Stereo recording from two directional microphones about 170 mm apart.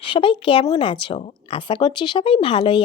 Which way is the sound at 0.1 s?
30° left (ahead or behind).